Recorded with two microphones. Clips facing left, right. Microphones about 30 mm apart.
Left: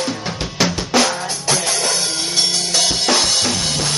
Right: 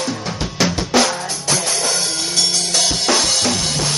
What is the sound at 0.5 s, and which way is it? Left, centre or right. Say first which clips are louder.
Drum: even; centre.